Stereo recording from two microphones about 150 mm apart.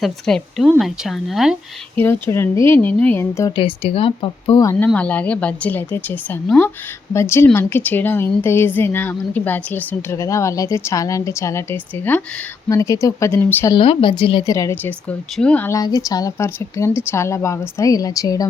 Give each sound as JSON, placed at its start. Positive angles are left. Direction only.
{"t": 0.0, "sound": "speech", "side_deg": 5}
{"t": 2.0, "sound": "a woman's voice", "side_deg": 15}
{"t": 3.5, "sound": "speech", "side_deg": 40}
{"t": 4.6, "sound": "a woman's voice", "side_deg": 15}
{"t": 13.7, "sound": "speech", "side_deg": 35}
{"t": 14.4, "sound": "speech", "side_deg": 20}
{"t": 15.4, "sound": "a woman's voice", "side_deg": 10}
{"t": 15.7, "sound": "speech", "side_deg": 20}